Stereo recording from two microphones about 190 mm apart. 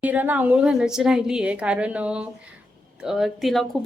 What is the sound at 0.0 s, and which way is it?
Speech, 10° right (ahead or behind).